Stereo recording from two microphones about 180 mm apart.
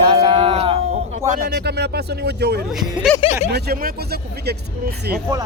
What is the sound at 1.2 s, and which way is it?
Speech, 45° right (ahead or behind).